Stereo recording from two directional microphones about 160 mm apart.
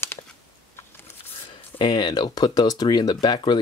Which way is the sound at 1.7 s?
30° left (ahead or behind).